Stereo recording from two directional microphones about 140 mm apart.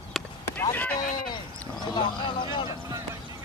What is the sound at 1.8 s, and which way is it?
Vehicle, 30° left (ahead or behind).